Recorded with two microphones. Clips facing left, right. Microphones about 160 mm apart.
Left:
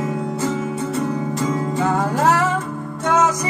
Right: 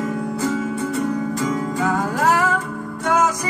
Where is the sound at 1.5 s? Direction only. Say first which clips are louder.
Left 3 dB; 25° left (ahead or behind).